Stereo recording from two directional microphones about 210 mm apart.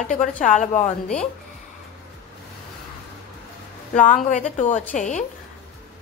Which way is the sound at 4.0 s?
35° left (ahead or behind).